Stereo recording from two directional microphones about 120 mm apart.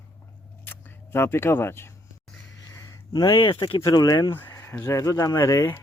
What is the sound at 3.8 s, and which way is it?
Speech, 30° left (ahead or behind).